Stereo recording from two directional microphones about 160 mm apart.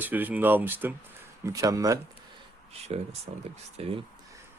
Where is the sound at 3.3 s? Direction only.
40° right (ahead or behind).